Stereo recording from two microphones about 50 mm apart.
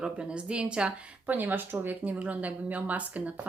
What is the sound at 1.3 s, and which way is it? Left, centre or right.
Speech, right.